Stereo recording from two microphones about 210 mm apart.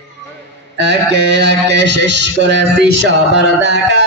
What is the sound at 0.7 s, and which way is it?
Mantra, 55° right (ahead or behind).